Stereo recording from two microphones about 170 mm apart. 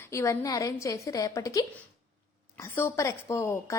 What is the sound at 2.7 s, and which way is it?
A woman's voice, 15° left (ahead or behind).